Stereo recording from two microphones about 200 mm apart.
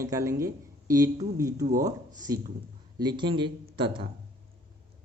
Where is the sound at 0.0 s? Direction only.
15° right (ahead or behind).